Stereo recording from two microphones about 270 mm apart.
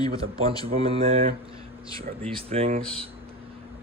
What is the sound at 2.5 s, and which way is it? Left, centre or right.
Speech, right.